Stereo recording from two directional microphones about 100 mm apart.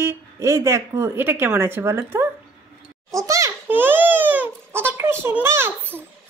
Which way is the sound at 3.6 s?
20° right (ahead or behind).